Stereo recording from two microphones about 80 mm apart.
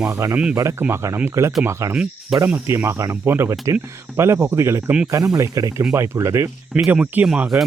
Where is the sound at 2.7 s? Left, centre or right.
Right.